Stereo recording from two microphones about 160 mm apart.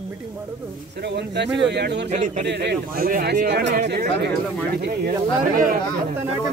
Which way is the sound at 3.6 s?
45° right (ahead or behind).